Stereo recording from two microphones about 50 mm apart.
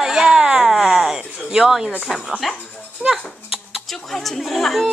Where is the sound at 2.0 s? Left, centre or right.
Centre.